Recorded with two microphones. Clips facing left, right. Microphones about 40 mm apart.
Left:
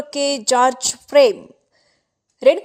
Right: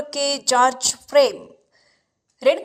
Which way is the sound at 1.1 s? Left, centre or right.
Left.